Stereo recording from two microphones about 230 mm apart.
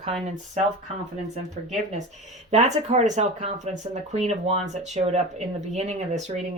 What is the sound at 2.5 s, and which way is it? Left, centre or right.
Speech, right.